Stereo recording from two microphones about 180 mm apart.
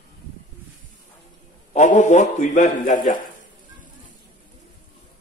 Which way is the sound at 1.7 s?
40° left (ahead or behind).